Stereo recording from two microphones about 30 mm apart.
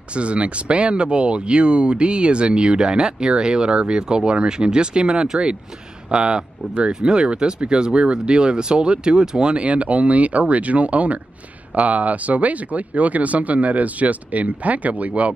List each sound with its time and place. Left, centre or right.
0.1 s speech: right
6.9 s speech: centre
7.2 s speech: right